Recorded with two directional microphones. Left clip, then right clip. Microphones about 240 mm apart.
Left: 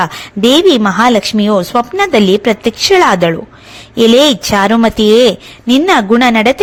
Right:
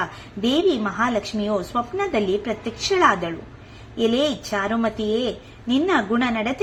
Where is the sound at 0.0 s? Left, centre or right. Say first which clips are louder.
Left 13 dB; left.